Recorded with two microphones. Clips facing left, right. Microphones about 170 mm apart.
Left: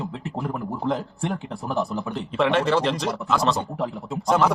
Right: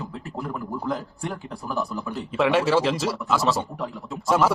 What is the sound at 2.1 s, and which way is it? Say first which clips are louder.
Speech: right 2 dB; 5° right (ahead or behind).